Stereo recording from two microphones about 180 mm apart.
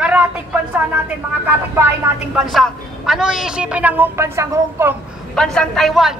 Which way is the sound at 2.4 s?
Centre (ahead or behind).